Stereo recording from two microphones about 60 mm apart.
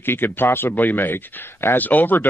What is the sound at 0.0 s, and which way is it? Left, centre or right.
Speech, left.